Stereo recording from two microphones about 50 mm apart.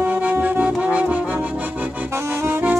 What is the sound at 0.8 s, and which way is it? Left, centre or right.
Brass instrument, right.